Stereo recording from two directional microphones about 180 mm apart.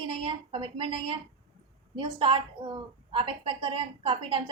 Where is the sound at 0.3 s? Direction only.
30° right (ahead or behind).